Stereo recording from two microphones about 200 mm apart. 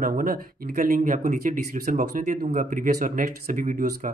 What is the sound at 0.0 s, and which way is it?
Speech, 40° right (ahead or behind).